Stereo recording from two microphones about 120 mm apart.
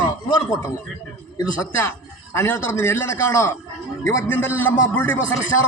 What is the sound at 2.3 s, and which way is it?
A man's voice, 20° left (ahead or behind).